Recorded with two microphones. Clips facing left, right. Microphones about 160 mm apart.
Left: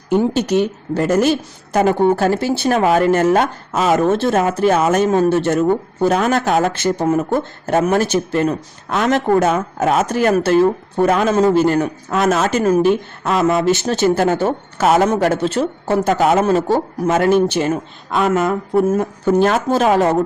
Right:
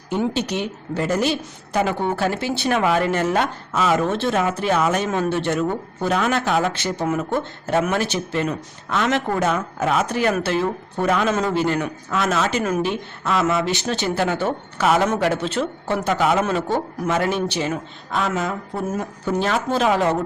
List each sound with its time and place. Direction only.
0.3 s a woman's voice: 45° left (ahead or behind)